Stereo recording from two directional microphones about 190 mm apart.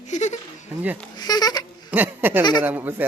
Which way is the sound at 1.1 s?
20° left (ahead or behind).